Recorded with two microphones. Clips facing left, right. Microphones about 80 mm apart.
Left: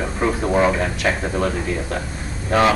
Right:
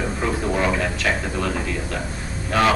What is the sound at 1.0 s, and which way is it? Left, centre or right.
Speech, left.